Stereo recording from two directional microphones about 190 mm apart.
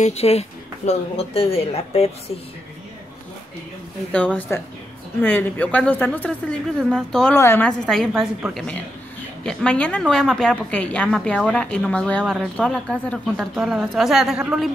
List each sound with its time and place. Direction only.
0.0 s speech: 35° left (ahead or behind)
4.1 s a woman's voice: 5° left (ahead or behind)